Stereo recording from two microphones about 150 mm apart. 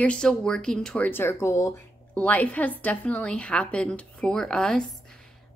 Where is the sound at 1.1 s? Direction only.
15° left (ahead or behind).